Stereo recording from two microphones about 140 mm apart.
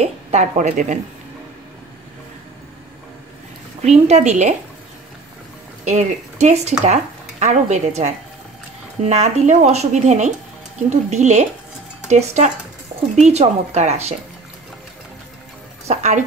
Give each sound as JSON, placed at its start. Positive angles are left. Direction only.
{"t": 0.0, "sound": "speech", "side_deg": -55}
{"t": 3.8, "sound": "speech", "side_deg": -55}
{"t": 5.9, "sound": "speech", "side_deg": -55}
{"t": 15.9, "sound": "speech", "side_deg": -55}